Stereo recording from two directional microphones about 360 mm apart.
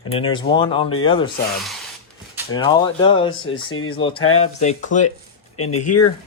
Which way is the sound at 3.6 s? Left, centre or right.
Left.